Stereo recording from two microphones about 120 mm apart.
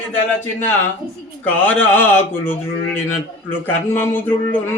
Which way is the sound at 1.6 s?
15° left (ahead or behind).